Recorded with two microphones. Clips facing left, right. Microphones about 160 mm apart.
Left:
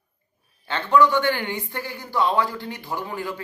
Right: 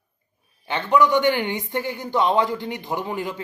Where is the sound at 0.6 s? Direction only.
15° right (ahead or behind).